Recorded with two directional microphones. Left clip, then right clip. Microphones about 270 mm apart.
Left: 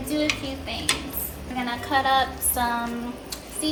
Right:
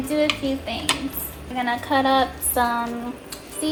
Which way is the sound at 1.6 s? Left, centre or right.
Right.